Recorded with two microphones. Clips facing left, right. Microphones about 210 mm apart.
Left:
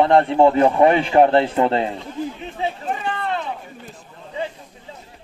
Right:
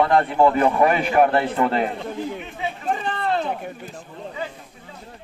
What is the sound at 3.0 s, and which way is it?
Run, 35° right (ahead or behind).